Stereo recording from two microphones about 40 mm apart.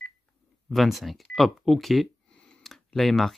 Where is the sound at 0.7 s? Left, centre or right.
Centre.